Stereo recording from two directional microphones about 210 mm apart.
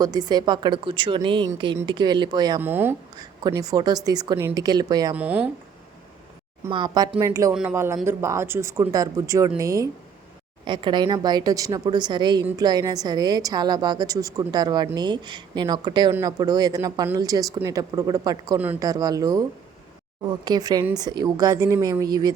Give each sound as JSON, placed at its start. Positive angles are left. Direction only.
{"t": 0.0, "sound": "a woman's voice", "side_deg": -20}
{"t": 5.1, "sound": "speech", "side_deg": -5}
{"t": 6.7, "sound": "a woman's voice", "side_deg": -20}